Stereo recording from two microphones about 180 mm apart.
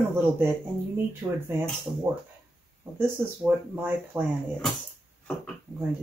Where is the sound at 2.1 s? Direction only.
15° right (ahead or behind).